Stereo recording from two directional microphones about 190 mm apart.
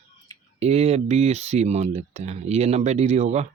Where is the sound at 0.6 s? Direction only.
35° right (ahead or behind).